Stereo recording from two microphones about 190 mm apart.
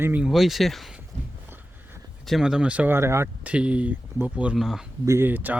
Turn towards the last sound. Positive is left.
turn(degrees=-10)  # may be behind; listen again after turning